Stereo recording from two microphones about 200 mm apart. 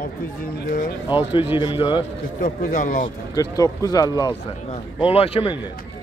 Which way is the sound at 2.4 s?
40° left (ahead or behind).